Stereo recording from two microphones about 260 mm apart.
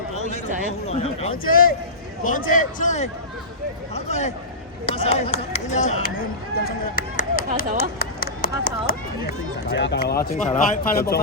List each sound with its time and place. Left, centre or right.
0.9 s speech: left